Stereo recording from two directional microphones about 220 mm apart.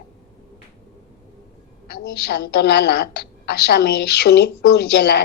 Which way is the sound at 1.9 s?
50° left (ahead or behind).